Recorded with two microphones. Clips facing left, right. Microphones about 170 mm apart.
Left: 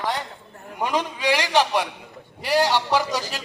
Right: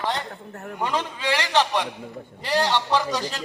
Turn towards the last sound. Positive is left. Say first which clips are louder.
# left 1 dB
turn(degrees=10)  # may be behind; listen again after turning